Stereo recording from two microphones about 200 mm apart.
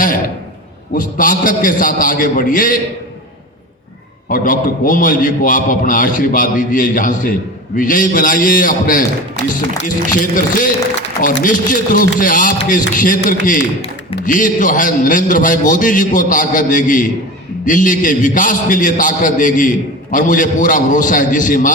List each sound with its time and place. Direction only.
0.9 s a man's voice: 45° left (ahead or behind)
4.3 s a man's voice: 45° left (ahead or behind)